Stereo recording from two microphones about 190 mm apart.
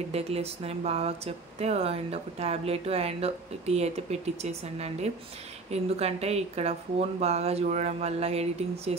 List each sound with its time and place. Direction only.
0.1 s speech: 35° right (ahead or behind)